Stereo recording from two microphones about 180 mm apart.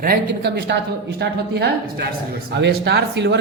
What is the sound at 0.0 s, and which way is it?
A woman's voice, 60° right (ahead or behind).